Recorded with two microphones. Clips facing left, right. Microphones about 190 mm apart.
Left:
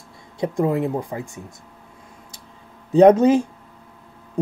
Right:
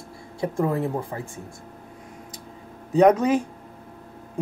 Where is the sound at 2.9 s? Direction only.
30° left (ahead or behind).